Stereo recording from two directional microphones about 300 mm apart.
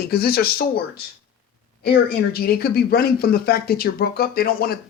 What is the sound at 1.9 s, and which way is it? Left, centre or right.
Speech, left.